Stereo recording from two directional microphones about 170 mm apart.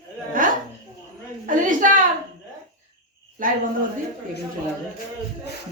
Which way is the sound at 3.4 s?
50° right (ahead or behind).